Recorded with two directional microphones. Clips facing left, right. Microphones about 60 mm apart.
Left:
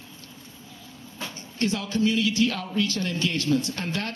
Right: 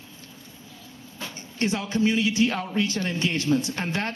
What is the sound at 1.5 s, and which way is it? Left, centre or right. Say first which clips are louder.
A man's voice: right 1 dB; right.